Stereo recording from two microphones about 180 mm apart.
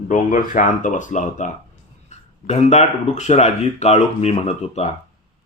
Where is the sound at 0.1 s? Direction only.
45° left (ahead or behind).